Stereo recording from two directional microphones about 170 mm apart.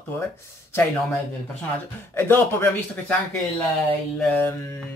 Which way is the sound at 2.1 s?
15° left (ahead or behind).